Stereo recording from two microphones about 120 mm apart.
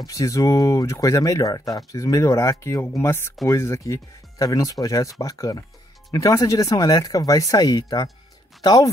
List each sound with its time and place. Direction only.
0.0 s speech: 30° left (ahead or behind)